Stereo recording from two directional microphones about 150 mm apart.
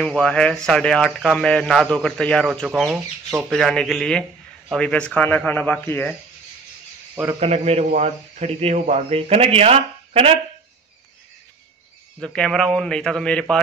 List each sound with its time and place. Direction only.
0.0 s speech: 5° left (ahead or behind)
7.3 s a man's voice: 45° right (ahead or behind)
12.2 s speech: 5° left (ahead or behind)